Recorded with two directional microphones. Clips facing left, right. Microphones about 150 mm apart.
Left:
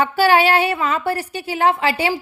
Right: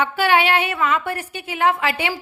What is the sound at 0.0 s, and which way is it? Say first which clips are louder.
A woman's voice: left 3 dB; 35° left (ahead or behind).